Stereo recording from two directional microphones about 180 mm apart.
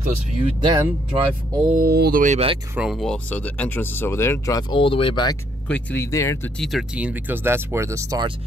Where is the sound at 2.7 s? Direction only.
Centre (ahead or behind); by 5.3 s 30° left (ahead or behind).